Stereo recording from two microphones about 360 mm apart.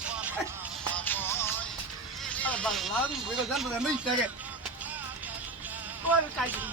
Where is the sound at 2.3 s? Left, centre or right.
Centre.